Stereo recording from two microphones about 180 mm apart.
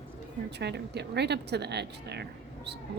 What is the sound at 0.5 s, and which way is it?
Speech, 70° right (ahead or behind).